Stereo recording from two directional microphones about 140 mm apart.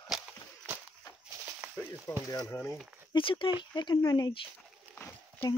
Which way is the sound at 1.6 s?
5° right (ahead or behind).